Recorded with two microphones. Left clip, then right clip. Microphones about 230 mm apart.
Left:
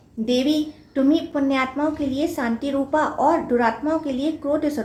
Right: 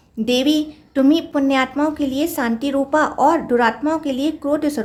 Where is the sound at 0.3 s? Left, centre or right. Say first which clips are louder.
Right 3 dB; right.